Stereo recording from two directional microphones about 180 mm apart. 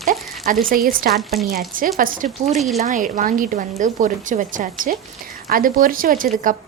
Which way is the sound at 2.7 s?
40° right (ahead or behind).